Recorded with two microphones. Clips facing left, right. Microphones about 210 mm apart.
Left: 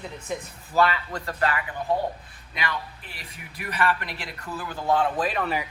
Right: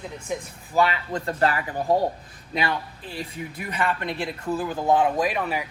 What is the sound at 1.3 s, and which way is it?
Speech, 35° right (ahead or behind).